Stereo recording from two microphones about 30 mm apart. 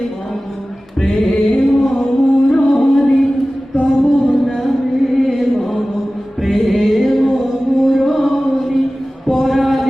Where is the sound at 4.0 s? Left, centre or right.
Centre.